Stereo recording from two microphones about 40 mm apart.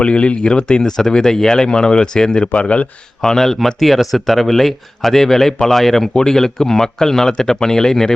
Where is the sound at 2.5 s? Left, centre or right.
Left.